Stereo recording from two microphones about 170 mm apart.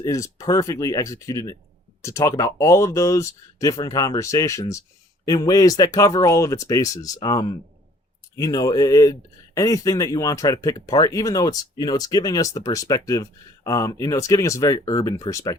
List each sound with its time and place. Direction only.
0.0 s speech: 20° left (ahead or behind)